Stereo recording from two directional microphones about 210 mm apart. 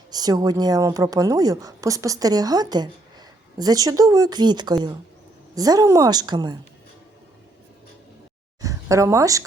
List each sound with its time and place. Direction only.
0.1 s a woman's voice: 20° right (ahead or behind)
8.6 s a woman's voice: 15° right (ahead or behind)